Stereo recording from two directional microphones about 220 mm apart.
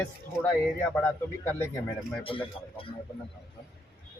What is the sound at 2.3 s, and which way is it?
Speech, 25° left (ahead or behind).